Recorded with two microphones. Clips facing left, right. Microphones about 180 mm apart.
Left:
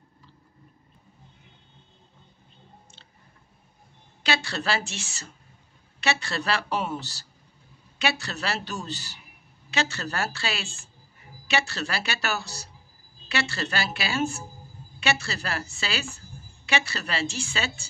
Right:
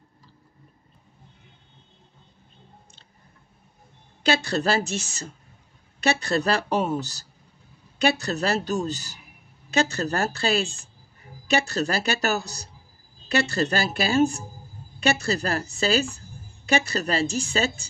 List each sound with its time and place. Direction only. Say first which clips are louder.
4.2 s a woman's voice: right 6 dB; 45° right (ahead or behind)